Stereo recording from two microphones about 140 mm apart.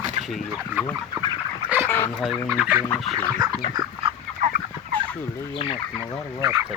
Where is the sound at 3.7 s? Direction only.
30° right (ahead or behind).